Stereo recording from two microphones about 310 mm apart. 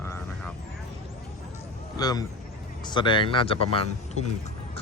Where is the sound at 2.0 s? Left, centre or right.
Centre.